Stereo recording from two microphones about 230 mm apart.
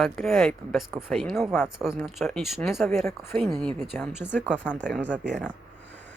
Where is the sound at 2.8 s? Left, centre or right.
Centre.